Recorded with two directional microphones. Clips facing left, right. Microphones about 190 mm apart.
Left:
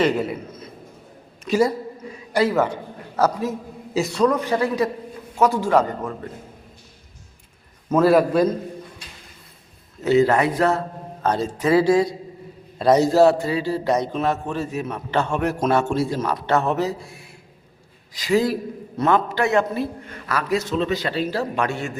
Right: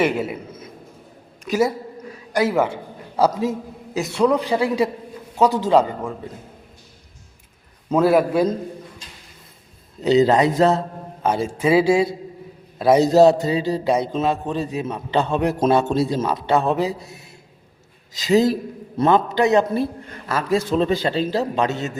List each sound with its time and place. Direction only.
0.0 s a man's voice: 10° right (ahead or behind)
1.5 s a man's voice: centre (ahead or behind)
3.9 s a man's voice: centre (ahead or behind)
4.3 s a man's voice: 15° right (ahead or behind)
8.0 s a man's voice: 5° right (ahead or behind)
10.0 s speech: 20° right (ahead or behind)
11.3 s a man's voice: 10° right (ahead or behind)
13.1 s a man's voice: 20° right (ahead or behind)
18.2 s speech: 25° right (ahead or behind)